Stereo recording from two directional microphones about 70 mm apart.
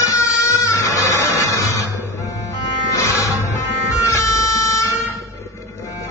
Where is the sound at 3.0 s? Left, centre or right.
Left.